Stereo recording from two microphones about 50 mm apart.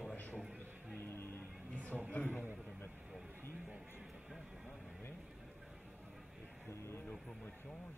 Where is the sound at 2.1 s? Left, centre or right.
Left.